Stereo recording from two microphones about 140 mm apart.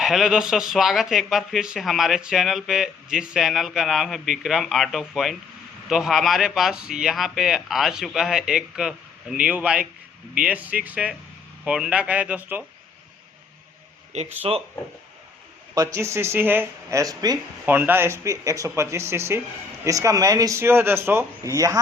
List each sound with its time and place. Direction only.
0.0 s speech: centre (ahead or behind)
14.1 s speech: 50° right (ahead or behind)
15.7 s speech: 25° right (ahead or behind)
17.7 s speech: 15° right (ahead or behind)